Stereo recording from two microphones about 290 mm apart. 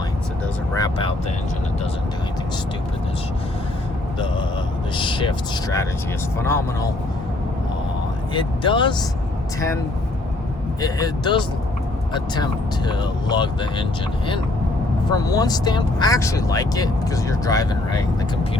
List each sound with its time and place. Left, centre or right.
0.8 s vehicle: centre
4.9 s speech: centre
8.3 s speech: centre
10.8 s speech: centre
15.1 s speech: centre